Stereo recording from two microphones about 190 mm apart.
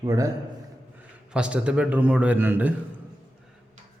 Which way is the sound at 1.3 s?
5° right (ahead or behind).